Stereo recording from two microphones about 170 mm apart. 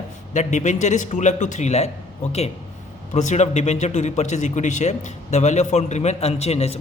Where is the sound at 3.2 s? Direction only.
45° left (ahead or behind).